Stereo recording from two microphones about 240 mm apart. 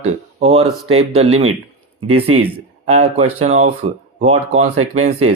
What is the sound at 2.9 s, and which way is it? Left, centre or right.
Speech, right.